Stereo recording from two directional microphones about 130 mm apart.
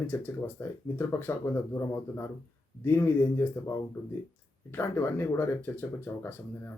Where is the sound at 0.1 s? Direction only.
15° left (ahead or behind).